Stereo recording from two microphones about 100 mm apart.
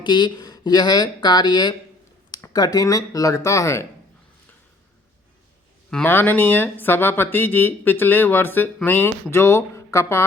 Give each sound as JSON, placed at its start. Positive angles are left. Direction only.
{"t": 0.0, "sound": "speech", "side_deg": 50}
{"t": 6.1, "sound": "speech", "side_deg": 20}